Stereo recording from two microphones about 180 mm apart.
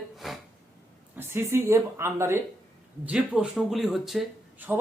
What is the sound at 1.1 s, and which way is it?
Speech, 15° right (ahead or behind).